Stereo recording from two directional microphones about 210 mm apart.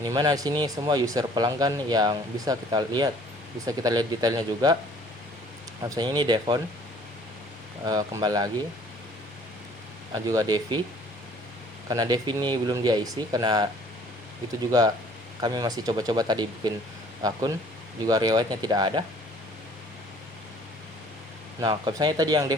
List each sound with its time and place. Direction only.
0.0 s speech: 20° right (ahead or behind)
5.8 s speech: 20° right (ahead or behind)
7.9 s speech: 20° right (ahead or behind)
10.1 s speech: 15° right (ahead or behind)
11.9 s speech: 20° right (ahead or behind)
14.7 s speech: 20° right (ahead or behind)
18.0 s speech: 20° right (ahead or behind)
21.6 s speech: 20° right (ahead or behind)